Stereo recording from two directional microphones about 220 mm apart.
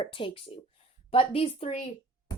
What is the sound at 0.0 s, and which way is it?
Speech, 25° left (ahead or behind).